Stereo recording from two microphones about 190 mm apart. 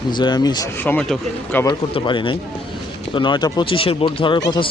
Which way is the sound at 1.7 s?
25° left (ahead or behind).